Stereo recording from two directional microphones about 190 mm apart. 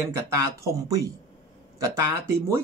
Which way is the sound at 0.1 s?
15° right (ahead or behind).